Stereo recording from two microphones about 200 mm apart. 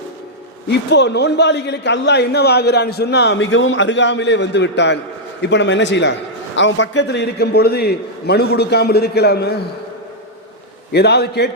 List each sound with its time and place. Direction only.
0.7 s a man's voice: 60° left (ahead or behind)
10.9 s a man's voice: 55° left (ahead or behind)